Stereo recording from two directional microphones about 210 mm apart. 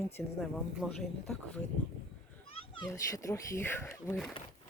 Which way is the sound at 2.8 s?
15° left (ahead or behind).